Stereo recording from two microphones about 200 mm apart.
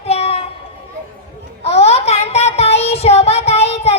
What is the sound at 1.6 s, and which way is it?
Child singing, 30° left (ahead or behind).